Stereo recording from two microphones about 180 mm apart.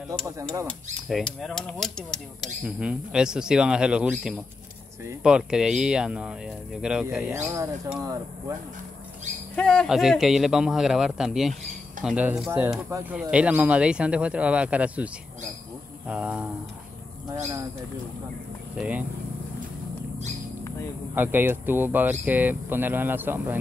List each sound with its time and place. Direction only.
0.4 s speech: 15° right (ahead or behind)
1.0 s speech: centre (ahead or behind)
8.0 s speech: 20° right (ahead or behind)
9.6 s speech: 5° left (ahead or behind)
16.1 s speech: 5° right (ahead or behind)
18.8 s speech: 10° right (ahead or behind)
21.1 s speech: 10° right (ahead or behind)